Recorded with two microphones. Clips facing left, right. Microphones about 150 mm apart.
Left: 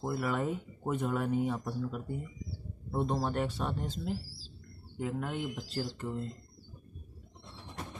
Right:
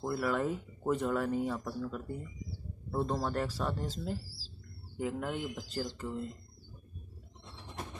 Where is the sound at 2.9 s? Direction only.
20° left (ahead or behind).